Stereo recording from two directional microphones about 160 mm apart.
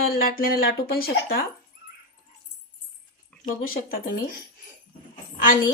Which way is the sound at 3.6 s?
65° left (ahead or behind).